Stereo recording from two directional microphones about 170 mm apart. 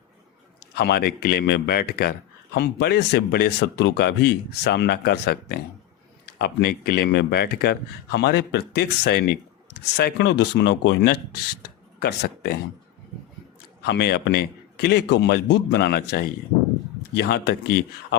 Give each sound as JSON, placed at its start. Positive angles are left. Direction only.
{"t": 0.8, "sound": "speech", "side_deg": 75}
{"t": 10.0, "sound": "speech", "side_deg": 85}
{"t": 13.8, "sound": "speech", "side_deg": 75}